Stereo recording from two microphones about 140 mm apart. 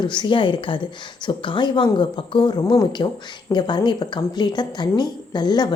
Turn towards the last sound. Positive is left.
turn(degrees=30)  # may be behind; listen again after turning